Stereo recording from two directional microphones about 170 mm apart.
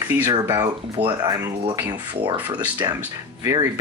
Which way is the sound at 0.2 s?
15° right (ahead or behind).